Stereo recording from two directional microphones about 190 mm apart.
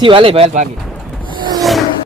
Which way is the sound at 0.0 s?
25° right (ahead or behind).